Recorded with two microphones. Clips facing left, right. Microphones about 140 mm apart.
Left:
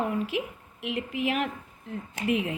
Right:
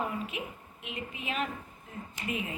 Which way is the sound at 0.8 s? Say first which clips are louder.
Left 11 dB; 75° left (ahead or behind).